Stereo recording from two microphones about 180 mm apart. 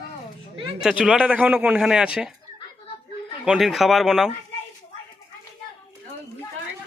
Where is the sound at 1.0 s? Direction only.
5° right (ahead or behind).